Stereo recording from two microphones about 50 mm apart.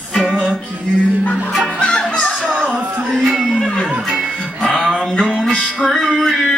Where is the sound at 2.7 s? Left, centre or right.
Right.